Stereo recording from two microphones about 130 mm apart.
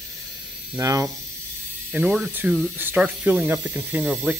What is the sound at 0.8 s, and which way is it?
Speech, 25° right (ahead or behind).